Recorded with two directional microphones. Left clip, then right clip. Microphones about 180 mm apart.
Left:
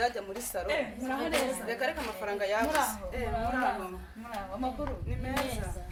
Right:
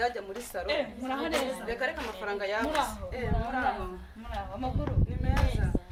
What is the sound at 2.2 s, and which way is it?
Speech, centre (ahead or behind).